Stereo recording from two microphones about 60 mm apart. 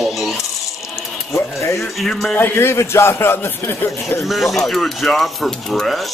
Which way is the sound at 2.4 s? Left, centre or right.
Left.